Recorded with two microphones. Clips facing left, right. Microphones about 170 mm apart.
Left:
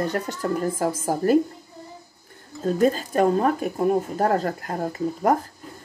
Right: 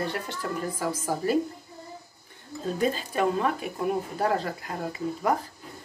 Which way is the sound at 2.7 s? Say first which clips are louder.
Left 7 dB; 45° left (ahead or behind).